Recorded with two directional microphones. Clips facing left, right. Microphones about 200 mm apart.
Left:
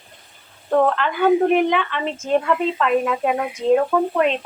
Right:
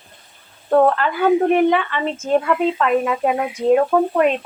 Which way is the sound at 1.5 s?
Centre (ahead or behind).